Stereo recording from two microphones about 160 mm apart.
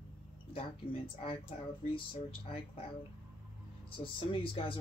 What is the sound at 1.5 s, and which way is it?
Speech, 45° left (ahead or behind).